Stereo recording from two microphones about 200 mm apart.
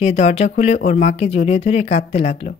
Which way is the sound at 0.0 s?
35° left (ahead or behind).